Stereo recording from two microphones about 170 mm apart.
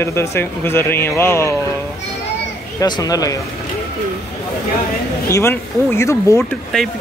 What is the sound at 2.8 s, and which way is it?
Speech, 25° left (ahead or behind).